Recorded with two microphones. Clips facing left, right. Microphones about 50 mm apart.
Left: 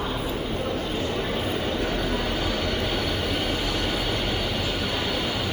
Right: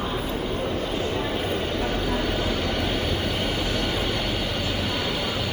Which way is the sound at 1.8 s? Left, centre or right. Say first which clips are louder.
Right 1 dB; right.